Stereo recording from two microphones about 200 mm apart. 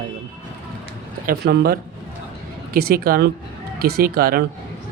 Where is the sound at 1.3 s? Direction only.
50° right (ahead or behind).